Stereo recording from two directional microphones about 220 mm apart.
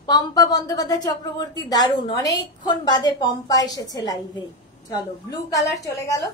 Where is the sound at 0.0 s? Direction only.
15° left (ahead or behind).